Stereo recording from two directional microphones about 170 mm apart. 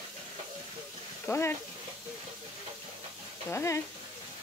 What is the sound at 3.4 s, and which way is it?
Speech, 15° left (ahead or behind).